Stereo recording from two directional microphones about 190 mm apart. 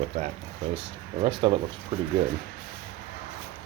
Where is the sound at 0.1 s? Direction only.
35° right (ahead or behind).